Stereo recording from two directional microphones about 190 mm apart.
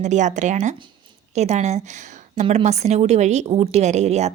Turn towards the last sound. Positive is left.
turn(degrees=-35)  # may be behind; listen again after turning